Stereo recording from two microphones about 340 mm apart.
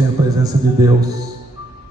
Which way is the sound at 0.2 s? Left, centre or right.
Centre.